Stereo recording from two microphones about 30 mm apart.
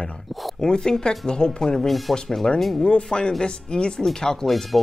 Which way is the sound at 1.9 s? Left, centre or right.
Centre.